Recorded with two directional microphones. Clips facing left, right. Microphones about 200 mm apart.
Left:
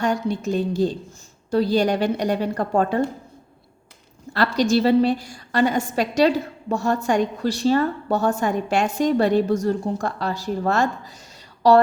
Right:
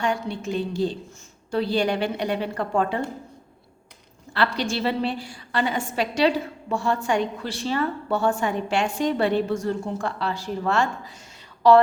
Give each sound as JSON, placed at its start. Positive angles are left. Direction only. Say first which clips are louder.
{"t": 0.0, "sound": "a woman's voice", "louder": "left 4 dB", "side_deg": 40}
{"t": 4.4, "sound": "a woman's voice", "louder": "left 6 dB", "side_deg": 40}